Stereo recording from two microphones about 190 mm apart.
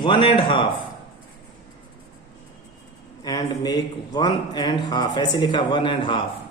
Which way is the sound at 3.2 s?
20° left (ahead or behind).